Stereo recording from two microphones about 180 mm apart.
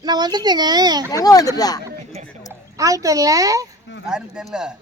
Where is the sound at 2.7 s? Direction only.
20° right (ahead or behind).